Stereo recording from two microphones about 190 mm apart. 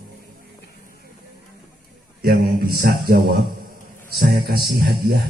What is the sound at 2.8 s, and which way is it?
Speech, 50° right (ahead or behind).